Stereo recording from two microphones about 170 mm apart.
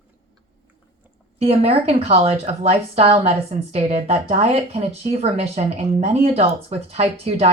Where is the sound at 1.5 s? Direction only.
35° right (ahead or behind).